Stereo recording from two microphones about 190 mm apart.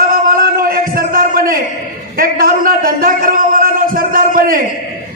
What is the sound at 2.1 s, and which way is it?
A man's voice, 50° right (ahead or behind).